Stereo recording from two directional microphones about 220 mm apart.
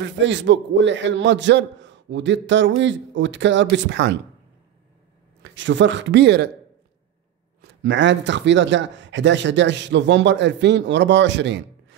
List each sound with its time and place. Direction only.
0.0 s speech: 55° right (ahead or behind)
5.4 s speech: 55° right (ahead or behind)
7.6 s speech: 55° right (ahead or behind)